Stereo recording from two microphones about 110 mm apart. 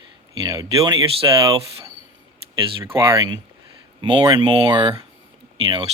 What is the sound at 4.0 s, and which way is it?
Speech, 45° right (ahead or behind).